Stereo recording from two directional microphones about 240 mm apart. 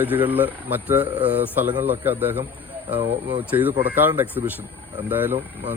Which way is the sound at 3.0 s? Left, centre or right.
Right.